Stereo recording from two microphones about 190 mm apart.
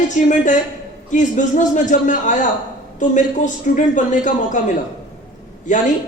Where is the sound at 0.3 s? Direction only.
40° left (ahead or behind).